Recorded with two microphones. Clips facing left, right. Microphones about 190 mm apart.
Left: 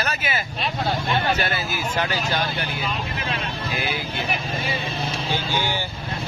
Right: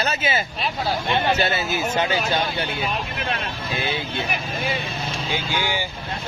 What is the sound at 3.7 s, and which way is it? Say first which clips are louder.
Speech: right 2 dB; 25° right (ahead or behind).